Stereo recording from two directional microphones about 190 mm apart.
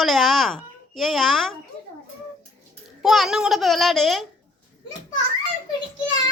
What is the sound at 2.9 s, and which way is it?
A woman's voice, centre (ahead or behind).